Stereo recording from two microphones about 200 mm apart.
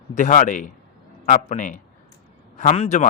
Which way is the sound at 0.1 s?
40° left (ahead or behind).